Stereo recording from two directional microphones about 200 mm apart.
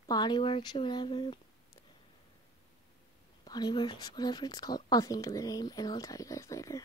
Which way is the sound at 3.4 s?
20° left (ahead or behind).